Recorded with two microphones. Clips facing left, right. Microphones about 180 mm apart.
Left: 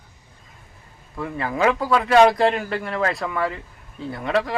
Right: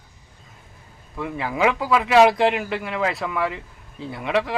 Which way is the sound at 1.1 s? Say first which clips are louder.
Even; centre (ahead or behind).